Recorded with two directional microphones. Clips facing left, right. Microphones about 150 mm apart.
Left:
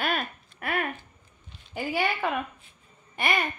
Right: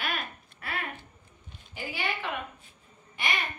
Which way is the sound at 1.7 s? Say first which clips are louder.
Left 7 dB; 55° left (ahead or behind).